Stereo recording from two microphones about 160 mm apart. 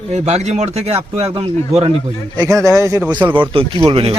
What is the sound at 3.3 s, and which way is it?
Speech, 30° right (ahead or behind).